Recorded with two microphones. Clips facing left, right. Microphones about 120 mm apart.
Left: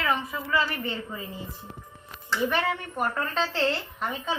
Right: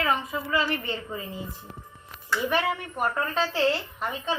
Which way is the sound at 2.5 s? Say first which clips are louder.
Right 1 dB; 5° right (ahead or behind).